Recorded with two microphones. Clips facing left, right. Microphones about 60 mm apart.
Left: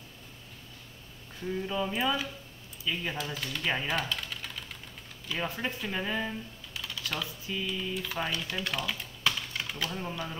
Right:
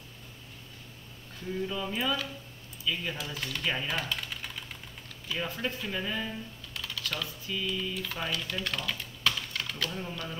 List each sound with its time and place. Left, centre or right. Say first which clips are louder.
1.5 s speech: left 1 dB; centre
3.9 s typing: left 1 dB; centre
5.3 s speech: even; left
6.7 s typing: even; centre
7.4 s speech: right 2 dB; centre